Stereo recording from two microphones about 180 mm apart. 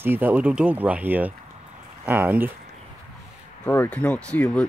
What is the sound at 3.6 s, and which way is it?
Speech, 10° left (ahead or behind).